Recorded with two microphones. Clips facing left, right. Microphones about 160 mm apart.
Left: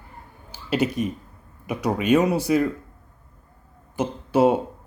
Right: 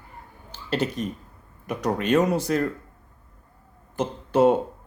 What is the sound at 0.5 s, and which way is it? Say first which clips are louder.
Speech: left 3 dB; 10° left (ahead or behind).